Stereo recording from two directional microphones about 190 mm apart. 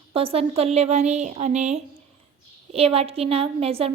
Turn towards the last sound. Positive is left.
turn(degrees=-30)  # may be behind; listen again after turning